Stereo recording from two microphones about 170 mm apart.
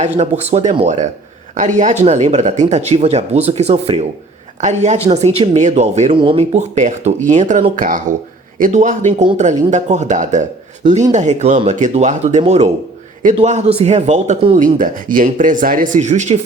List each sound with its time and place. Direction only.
0.0 s speech: 40° right (ahead or behind)